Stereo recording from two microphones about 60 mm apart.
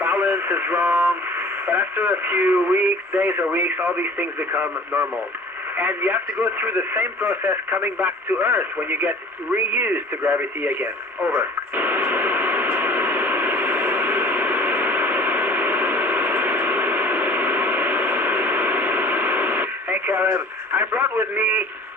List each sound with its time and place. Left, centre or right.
0.0 s speech: right
5.7 s radio: right